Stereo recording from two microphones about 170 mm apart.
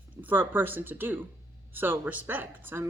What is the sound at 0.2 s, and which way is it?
A woman's voice, 10° right (ahead or behind).